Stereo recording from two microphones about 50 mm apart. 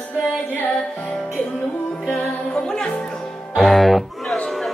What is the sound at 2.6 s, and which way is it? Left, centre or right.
Music, centre.